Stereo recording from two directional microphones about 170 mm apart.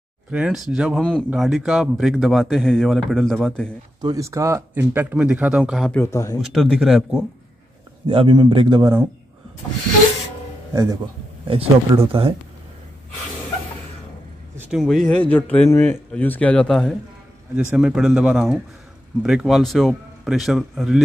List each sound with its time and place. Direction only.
0.3 s speech: 5° right (ahead or behind)
4.0 s speech: 20° right (ahead or behind); by 7.2 s centre (ahead or behind)
8.1 s a man's voice: 30° right (ahead or behind)
10.7 s speech: 20° right (ahead or behind)
11.4 s speech: 30° right (ahead or behind)
14.6 s speech: centre (ahead or behind)